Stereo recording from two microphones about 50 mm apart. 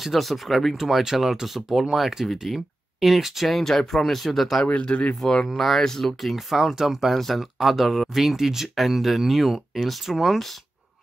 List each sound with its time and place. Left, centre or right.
0.0 s speech: centre
4.6 s speech: left
5.6 s speech: centre
6.5 s speech: centre